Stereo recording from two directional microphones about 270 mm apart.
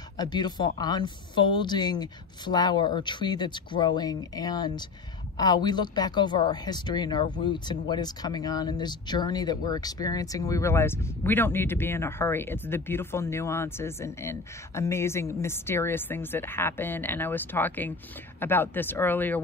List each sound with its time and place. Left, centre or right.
0.2 s speech: centre